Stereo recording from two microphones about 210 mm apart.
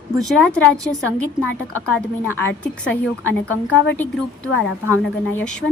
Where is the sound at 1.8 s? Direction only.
5° left (ahead or behind).